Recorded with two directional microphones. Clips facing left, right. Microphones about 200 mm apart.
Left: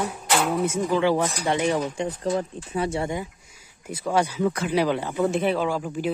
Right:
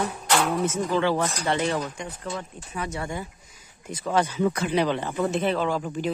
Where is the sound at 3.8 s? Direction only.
10° left (ahead or behind).